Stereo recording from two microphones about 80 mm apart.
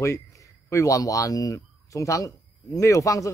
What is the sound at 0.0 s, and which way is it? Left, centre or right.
Speech, left.